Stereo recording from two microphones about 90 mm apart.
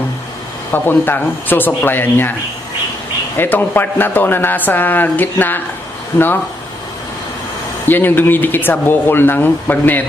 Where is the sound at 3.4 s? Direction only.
25° left (ahead or behind).